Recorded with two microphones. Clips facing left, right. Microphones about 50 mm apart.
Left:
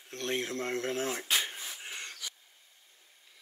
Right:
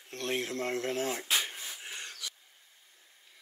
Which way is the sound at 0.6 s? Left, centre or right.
Left.